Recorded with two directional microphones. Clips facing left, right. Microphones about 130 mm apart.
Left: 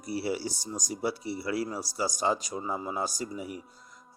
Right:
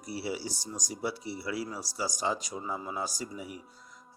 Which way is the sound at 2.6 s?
35° left (ahead or behind).